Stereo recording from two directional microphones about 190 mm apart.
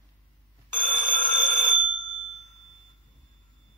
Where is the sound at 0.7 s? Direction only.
10° left (ahead or behind).